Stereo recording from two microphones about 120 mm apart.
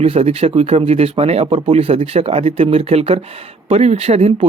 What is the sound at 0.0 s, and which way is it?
Speech, 60° right (ahead or behind).